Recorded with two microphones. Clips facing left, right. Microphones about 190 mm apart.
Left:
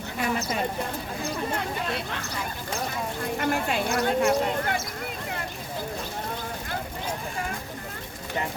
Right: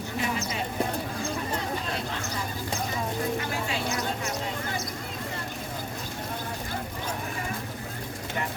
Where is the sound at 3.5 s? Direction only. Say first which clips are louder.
Left 4 dB; 55° left (ahead or behind).